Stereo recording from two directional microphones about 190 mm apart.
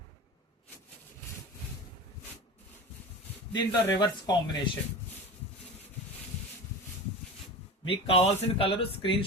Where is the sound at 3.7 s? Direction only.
20° left (ahead or behind).